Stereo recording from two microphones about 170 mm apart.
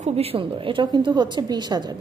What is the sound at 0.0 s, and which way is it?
A woman's voice, 35° right (ahead or behind).